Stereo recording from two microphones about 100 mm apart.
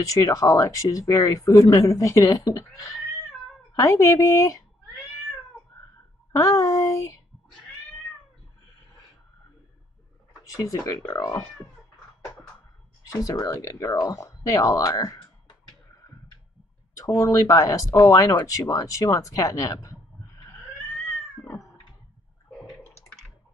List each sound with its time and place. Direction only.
0.0 s speech: 35° left (ahead or behind)
6.3 s speech: 35° left (ahead or behind)
10.5 s speech: 35° left (ahead or behind)
13.1 s speech: 35° left (ahead or behind)
16.9 s speech: 35° left (ahead or behind)